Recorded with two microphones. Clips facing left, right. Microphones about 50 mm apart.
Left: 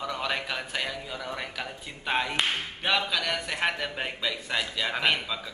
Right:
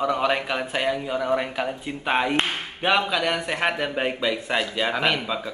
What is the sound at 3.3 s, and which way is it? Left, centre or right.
Speech, right.